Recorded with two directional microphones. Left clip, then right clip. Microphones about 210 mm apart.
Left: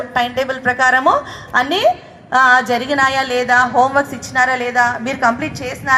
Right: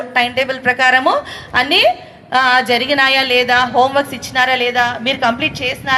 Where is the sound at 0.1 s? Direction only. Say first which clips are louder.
Right 3 dB; 15° right (ahead or behind).